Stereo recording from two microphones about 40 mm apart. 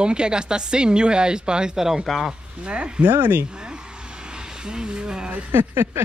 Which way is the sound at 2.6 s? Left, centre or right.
Right.